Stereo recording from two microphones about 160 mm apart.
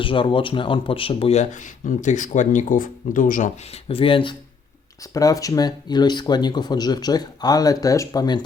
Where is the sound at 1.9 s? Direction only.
50° left (ahead or behind).